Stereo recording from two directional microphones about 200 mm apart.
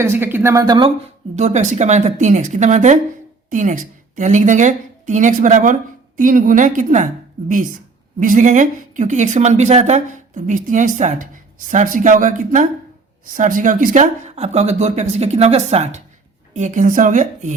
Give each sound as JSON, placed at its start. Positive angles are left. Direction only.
{"t": 0.0, "sound": "speech", "side_deg": -10}
{"t": 1.4, "sound": "a woman's voice", "side_deg": -35}